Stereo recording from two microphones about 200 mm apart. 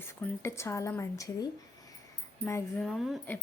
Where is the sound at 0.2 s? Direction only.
15° left (ahead or behind).